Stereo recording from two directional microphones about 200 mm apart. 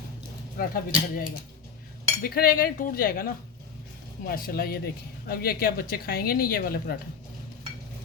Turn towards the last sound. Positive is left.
turn(degrees=50)  # may be behind; listen again after turning